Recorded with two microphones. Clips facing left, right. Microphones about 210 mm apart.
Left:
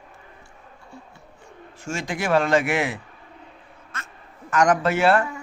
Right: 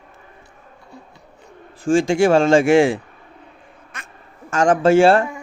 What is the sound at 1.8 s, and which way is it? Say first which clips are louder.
A man's voice: right 12 dB; 30° right (ahead or behind).